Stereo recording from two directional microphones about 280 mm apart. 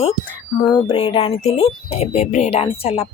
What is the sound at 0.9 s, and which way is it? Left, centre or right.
Speech, left.